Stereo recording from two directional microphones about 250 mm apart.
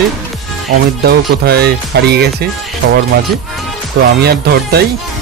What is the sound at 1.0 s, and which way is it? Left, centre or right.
Speech, right.